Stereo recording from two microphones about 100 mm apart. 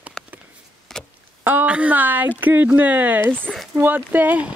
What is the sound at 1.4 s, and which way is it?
Speech, 15° right (ahead or behind).